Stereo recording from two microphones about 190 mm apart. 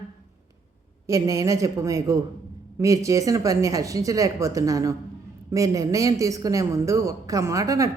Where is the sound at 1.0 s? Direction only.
15° right (ahead or behind).